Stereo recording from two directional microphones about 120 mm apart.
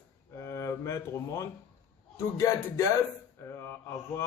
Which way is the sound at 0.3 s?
25° left (ahead or behind).